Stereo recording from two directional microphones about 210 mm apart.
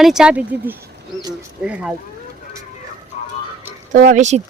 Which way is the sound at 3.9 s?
40° right (ahead or behind).